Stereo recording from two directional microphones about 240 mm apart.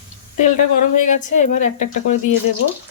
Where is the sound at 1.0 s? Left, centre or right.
Left.